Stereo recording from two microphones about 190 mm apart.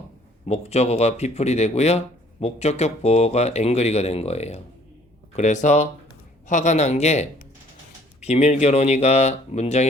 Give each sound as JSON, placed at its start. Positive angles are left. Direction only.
{"t": 0.4, "sound": "speech", "side_deg": 35}